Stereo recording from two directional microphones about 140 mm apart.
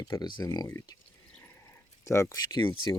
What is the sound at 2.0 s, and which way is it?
Speech, 20° left (ahead or behind).